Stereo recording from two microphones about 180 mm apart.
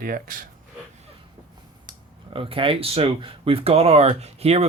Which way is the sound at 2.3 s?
30° right (ahead or behind).